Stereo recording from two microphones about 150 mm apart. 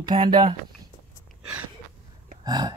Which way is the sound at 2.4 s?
25° right (ahead or behind).